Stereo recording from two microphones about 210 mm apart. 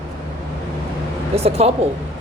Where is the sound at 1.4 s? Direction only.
30° right (ahead or behind).